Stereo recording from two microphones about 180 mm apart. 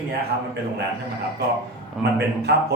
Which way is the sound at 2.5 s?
70° right (ahead or behind).